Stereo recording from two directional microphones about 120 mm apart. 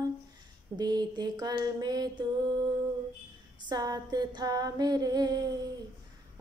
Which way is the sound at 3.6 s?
35° right (ahead or behind).